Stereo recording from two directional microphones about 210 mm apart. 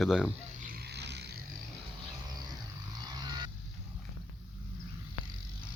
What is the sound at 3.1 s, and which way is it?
Vehicle, 20° right (ahead or behind).